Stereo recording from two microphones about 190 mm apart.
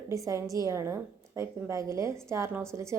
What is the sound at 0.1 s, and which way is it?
A woman's voice, 15° right (ahead or behind).